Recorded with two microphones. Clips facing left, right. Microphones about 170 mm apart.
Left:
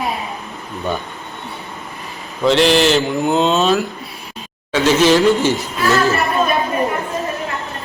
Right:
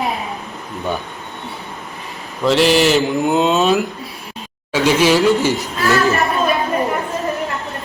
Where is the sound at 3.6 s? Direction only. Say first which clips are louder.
Right 1 dB; 15° right (ahead or behind).